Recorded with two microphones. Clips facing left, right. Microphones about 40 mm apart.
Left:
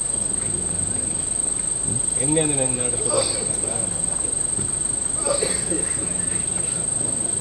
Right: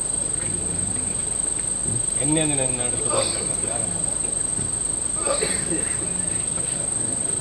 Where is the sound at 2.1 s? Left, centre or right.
Centre.